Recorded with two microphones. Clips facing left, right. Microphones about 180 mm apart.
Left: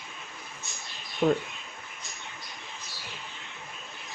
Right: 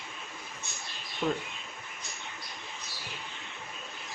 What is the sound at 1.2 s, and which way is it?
Speech, 55° left (ahead or behind).